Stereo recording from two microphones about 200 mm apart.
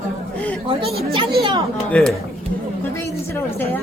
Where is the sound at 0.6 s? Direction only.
30° right (ahead or behind).